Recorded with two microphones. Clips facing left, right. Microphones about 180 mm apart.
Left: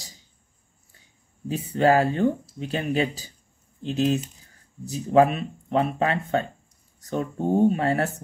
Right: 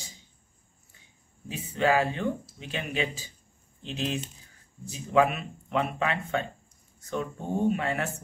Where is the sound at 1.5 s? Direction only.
40° left (ahead or behind).